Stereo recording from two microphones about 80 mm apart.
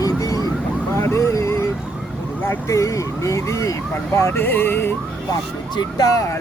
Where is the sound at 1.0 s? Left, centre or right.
Left.